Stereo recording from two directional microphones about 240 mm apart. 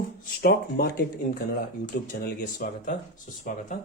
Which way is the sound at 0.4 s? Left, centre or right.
Left.